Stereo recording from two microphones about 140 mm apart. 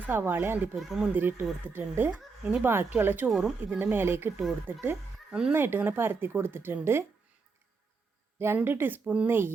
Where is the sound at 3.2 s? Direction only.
Centre (ahead or behind).